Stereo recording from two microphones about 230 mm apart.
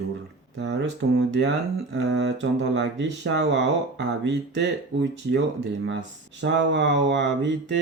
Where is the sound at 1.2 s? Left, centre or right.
Right.